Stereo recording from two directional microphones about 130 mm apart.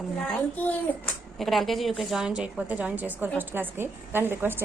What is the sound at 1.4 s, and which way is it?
A woman's voice, centre (ahead or behind).